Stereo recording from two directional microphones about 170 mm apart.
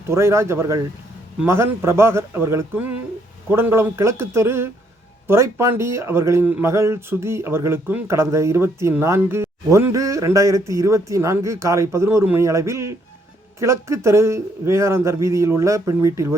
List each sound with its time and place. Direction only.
0.1 s speech: 15° right (ahead or behind)